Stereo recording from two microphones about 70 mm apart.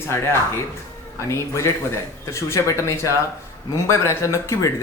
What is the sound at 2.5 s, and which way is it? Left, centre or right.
Speech, left.